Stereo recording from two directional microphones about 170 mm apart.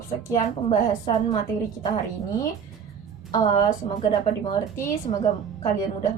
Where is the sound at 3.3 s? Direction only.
25° left (ahead or behind).